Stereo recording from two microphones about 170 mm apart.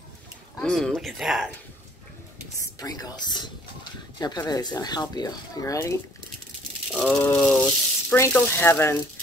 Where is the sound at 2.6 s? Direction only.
20° left (ahead or behind).